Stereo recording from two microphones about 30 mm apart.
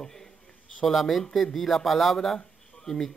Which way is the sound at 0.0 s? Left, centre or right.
Centre.